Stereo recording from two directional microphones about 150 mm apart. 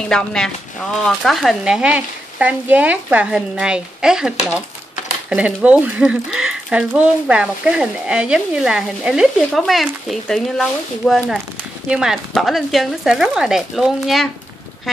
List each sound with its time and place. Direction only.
0.1 s speech: 5° left (ahead or behind)
5.3 s speech: 10° right (ahead or behind)